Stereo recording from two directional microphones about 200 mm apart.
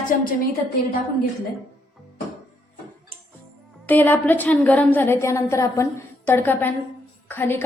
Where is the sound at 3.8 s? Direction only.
10° left (ahead or behind).